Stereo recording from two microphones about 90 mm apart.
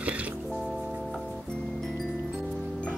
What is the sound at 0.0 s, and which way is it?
Music, 15° right (ahead or behind).